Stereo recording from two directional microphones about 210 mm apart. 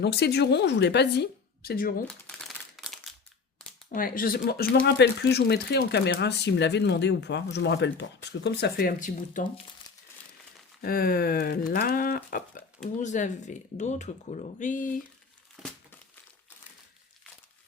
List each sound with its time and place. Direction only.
0.0 s speech: 50° left (ahead or behind)
2.0 s crumpling: 5° left (ahead or behind)
3.9 s speech: 40° left (ahead or behind)
10.8 s speech: 45° left (ahead or behind)
15.6 s crumpling: 5° right (ahead or behind)